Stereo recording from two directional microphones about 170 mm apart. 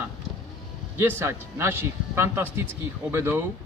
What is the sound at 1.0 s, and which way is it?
A man's voice, 15° right (ahead or behind).